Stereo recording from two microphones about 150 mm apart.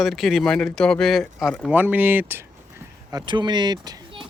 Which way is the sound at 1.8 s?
10° right (ahead or behind).